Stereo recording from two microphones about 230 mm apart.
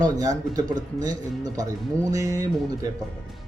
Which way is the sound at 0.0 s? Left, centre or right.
Centre.